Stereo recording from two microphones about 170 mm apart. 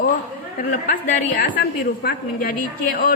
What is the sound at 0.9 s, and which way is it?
A woman's voice, 50° left (ahead or behind).